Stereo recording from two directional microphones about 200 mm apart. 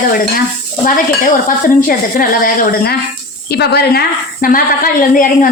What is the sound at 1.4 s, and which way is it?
A woman's voice, 45° left (ahead or behind).